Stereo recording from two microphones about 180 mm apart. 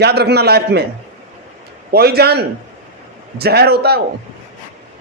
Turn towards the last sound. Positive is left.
turn(degrees=-60)  # may be behind; listen again after turning